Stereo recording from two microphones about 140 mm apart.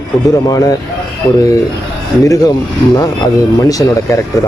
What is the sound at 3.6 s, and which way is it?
Speech, 25° left (ahead or behind).